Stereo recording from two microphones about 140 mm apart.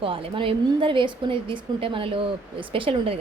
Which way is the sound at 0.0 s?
40° right (ahead or behind).